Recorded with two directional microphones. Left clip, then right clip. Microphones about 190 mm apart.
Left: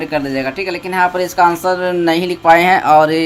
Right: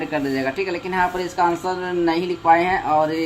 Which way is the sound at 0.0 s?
20° left (ahead or behind).